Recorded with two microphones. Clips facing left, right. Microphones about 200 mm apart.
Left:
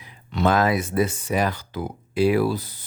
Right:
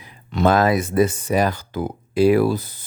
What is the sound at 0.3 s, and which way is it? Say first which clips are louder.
Speech: right 3 dB; 45° right (ahead or behind).